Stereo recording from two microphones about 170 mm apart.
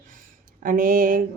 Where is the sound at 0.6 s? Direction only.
55° right (ahead or behind).